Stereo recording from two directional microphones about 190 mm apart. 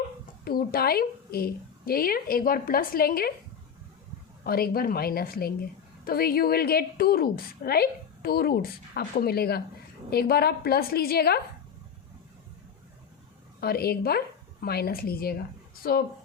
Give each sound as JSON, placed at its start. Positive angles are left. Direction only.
{"t": 0.4, "sound": "a woman's voice", "side_deg": 50}
{"t": 4.4, "sound": "a woman's voice", "side_deg": 55}
{"t": 13.6, "sound": "a woman's voice", "side_deg": 55}